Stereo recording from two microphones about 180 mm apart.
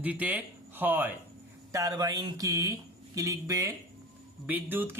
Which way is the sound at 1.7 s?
20° right (ahead or behind).